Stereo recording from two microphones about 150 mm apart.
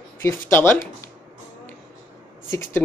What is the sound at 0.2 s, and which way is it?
Speech, 15° left (ahead or behind).